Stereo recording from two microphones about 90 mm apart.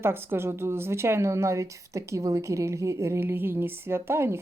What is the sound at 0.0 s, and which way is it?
A woman's voice, 25° right (ahead or behind).